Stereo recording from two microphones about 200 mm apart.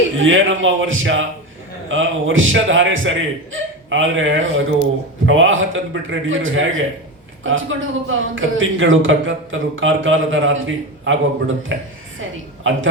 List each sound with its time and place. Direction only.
0.2 s a man's voice: 75° right (ahead or behind)
12.7 s a man's voice: 75° right (ahead or behind)